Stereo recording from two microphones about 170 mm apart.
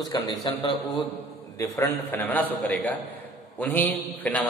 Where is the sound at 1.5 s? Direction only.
15° left (ahead or behind).